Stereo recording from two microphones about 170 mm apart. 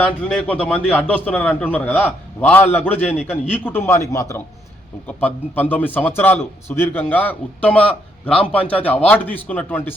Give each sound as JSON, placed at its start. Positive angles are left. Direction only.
{"t": 0.0, "sound": "a man's voice", "side_deg": 5}